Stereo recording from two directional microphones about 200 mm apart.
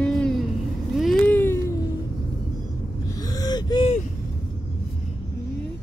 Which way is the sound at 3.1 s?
20° left (ahead or behind).